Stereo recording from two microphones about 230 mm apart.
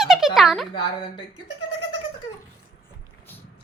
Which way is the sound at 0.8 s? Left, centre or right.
Left.